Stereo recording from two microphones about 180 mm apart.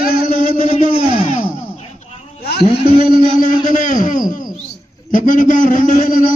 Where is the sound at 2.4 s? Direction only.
65° left (ahead or behind).